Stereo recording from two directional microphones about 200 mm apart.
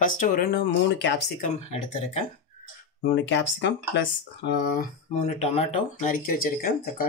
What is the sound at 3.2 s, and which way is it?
Speech, 65° left (ahead or behind).